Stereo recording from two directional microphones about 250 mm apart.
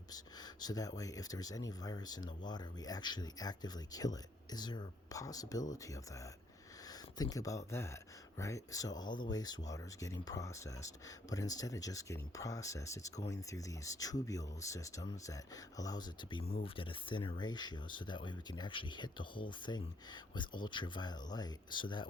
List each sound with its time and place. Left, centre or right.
0.6 s speech: centre
7.2 s speech: centre